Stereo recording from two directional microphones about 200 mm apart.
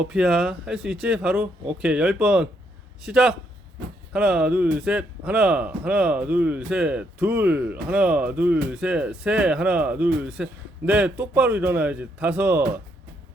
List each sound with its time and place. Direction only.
0.0 s speech: 5° right (ahead or behind)